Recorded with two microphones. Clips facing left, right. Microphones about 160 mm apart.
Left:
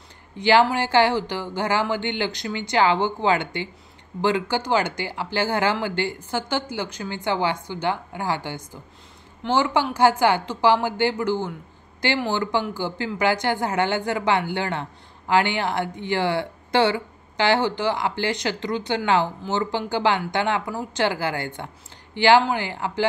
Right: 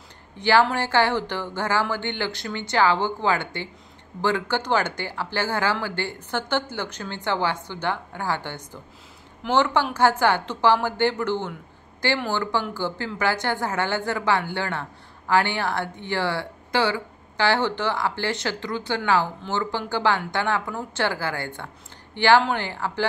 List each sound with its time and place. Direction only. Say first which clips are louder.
0.4 s a woman's voice: left 2 dB; 15° left (ahead or behind)